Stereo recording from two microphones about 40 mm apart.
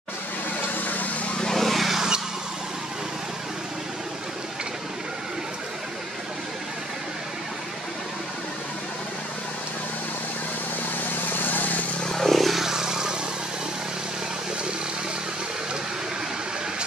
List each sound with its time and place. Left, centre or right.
0.7 s vehicle: left
1.5 s vehicle: centre
2.0 s vehicle: centre
11.5 s vehicle: left
12.1 s vehicle: centre
12.6 s vehicle: centre